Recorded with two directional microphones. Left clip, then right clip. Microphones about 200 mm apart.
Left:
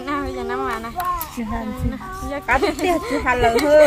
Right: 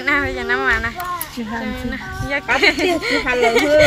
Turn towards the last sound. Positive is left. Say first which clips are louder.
# right 1 dB
turn(degrees=0)  # may be behind; listen again after turning